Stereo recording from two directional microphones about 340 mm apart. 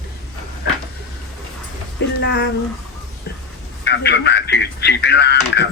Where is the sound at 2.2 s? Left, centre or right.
Left.